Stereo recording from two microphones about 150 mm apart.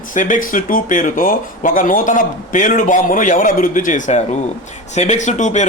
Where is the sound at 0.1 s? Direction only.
60° left (ahead or behind).